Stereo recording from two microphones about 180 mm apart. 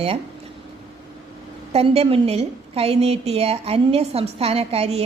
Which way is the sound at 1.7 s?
35° right (ahead or behind).